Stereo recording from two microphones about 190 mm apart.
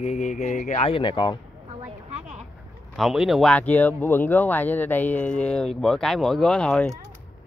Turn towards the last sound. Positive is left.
turn(degrees=5)  # may be behind; listen again after turning